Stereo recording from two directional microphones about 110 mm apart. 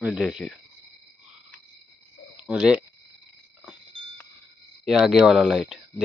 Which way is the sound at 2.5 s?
5° right (ahead or behind).